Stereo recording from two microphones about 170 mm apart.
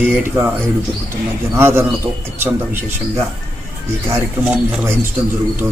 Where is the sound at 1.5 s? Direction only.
15° right (ahead or behind).